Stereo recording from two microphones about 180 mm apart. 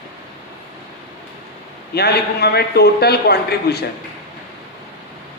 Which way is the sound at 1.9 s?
60° left (ahead or behind).